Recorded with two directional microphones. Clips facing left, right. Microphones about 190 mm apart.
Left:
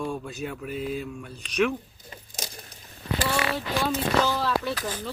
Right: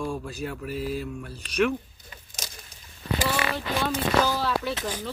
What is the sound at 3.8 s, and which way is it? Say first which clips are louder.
Speech: even; centre (ahead or behind).